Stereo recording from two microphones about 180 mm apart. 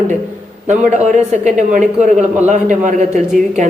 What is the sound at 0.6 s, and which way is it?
A man's voice, 40° right (ahead or behind).